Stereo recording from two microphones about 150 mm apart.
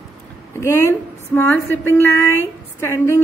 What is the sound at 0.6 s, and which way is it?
A woman's voice, 20° left (ahead or behind).